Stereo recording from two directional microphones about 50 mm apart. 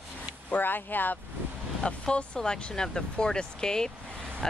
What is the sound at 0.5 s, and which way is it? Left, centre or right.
Speech, left.